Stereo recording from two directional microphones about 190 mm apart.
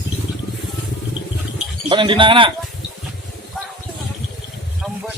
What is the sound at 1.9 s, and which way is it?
Speech, 25° right (ahead or behind).